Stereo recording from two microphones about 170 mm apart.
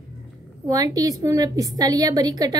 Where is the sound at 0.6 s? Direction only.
20° right (ahead or behind).